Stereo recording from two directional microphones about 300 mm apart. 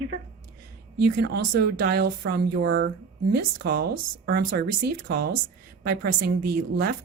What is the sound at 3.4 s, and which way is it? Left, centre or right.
Speech, right.